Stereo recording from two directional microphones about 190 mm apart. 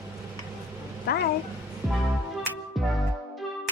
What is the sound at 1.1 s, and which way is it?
Speech, 55° left (ahead or behind).